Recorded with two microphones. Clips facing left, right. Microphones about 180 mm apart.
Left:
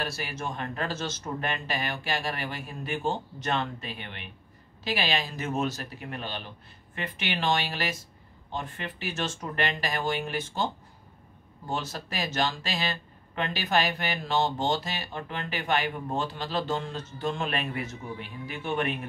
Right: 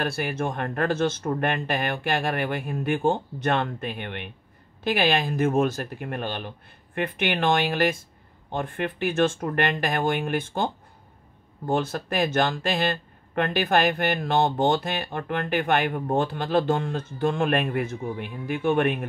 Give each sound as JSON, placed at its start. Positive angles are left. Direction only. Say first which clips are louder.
{"t": 0.0, "sound": "speech", "louder": "right 7 dB", "side_deg": -55}